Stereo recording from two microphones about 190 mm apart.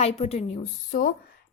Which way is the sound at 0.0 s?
35° left (ahead or behind).